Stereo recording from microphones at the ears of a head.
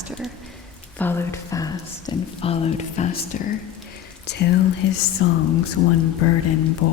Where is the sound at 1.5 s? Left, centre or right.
Left.